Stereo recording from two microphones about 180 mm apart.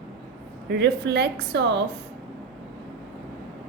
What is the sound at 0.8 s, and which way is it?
Speech, 70° right (ahead or behind).